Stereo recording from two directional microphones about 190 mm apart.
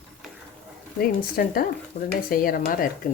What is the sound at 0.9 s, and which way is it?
Speech, 50° left (ahead or behind).